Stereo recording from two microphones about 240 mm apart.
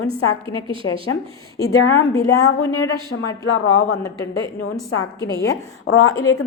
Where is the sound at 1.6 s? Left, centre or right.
Left.